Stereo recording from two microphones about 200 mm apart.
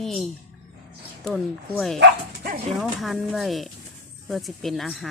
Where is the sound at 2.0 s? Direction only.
45° right (ahead or behind).